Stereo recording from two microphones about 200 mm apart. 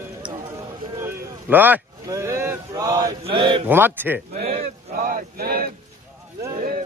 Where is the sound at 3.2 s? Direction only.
25° right (ahead or behind).